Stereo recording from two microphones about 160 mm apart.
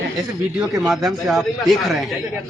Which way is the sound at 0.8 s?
Centre (ahead or behind).